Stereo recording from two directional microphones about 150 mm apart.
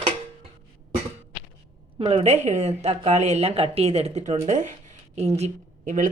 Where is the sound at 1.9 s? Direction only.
40° right (ahead or behind).